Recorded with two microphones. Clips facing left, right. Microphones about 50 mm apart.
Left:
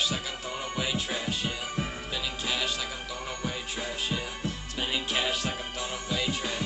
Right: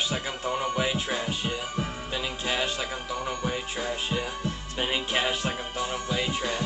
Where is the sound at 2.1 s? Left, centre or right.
Right.